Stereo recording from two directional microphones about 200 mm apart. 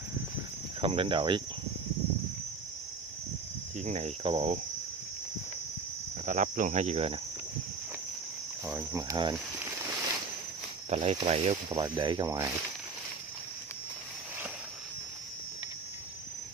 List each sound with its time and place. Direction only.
0.7 s speech: 25° right (ahead or behind)
3.8 s cricket: 35° right (ahead or behind)
6.2 s cricket: 40° right (ahead or behind)
8.6 s speech: 10° right (ahead or behind)
10.9 s speech: 35° right (ahead or behind)
11.2 s cricket: 30° right (ahead or behind)
11.7 s speech: 20° right (ahead or behind)